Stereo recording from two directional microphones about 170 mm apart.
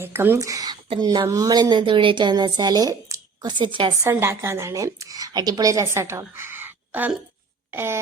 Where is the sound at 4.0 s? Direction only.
15° right (ahead or behind).